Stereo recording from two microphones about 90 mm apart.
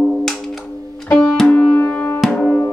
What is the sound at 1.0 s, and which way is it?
Music, 10° left (ahead or behind).